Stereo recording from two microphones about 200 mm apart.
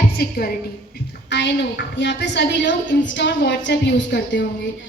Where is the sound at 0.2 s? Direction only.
50° left (ahead or behind).